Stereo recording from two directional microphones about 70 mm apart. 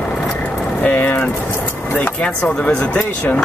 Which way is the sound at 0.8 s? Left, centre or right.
Left.